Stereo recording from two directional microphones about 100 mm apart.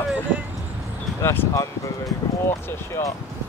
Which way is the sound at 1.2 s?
25° left (ahead or behind).